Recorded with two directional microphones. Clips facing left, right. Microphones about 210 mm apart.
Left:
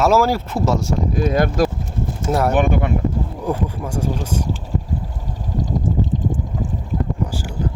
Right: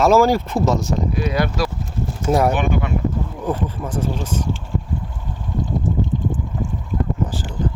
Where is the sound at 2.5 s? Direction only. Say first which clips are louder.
Left 3 dB; 50° left (ahead or behind).